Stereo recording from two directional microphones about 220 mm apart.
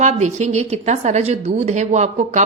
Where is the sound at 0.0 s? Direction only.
30° right (ahead or behind).